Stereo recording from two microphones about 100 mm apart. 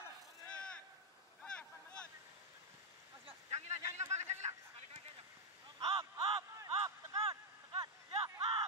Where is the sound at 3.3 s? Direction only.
90° right.